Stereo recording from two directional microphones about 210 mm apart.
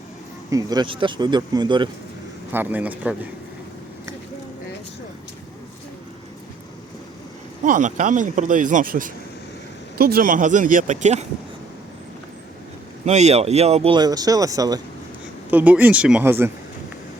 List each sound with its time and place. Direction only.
0.5 s speech: 20° right (ahead or behind)
2.5 s speech: 10° right (ahead or behind)
7.6 s speech: 35° right (ahead or behind)
13.1 s speech: 30° right (ahead or behind); by 16.5 s 10° right (ahead or behind)